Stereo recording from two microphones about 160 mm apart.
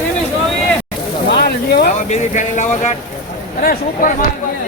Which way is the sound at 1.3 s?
90° left.